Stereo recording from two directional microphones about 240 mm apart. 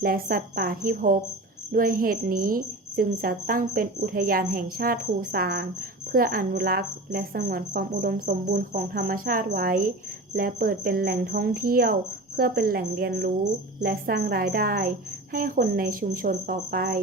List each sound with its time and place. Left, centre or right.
0.0 s a woman's voice: right